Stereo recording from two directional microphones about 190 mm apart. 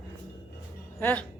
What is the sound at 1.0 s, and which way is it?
Speech, 10° left (ahead or behind).